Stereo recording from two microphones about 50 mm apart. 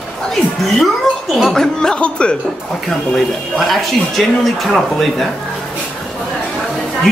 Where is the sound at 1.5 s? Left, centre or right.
Centre.